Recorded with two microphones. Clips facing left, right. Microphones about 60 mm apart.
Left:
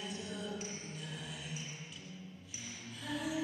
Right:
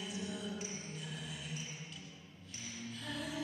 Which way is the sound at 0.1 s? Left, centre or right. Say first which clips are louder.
Even; centre.